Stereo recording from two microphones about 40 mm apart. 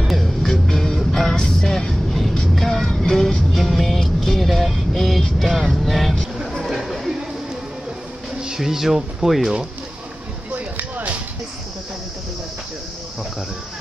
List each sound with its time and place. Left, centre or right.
0.0 s music: centre
1.6 s vehicle: centre
2.5 s music: centre
5.4 s vehicle: centre
6.4 s a sound: centre
8.4 s speech: centre
10.5 s music: right